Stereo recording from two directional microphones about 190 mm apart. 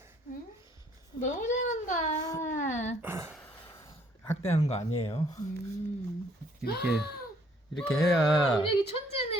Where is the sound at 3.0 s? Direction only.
10° right (ahead or behind).